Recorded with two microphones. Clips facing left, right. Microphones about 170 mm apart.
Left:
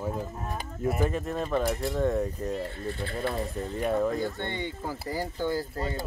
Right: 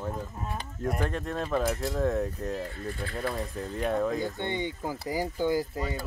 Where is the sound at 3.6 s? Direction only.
Centre (ahead or behind).